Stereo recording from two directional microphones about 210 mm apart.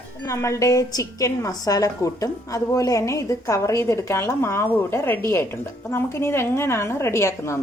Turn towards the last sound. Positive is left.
turn(degrees=15)  # may be behind; listen again after turning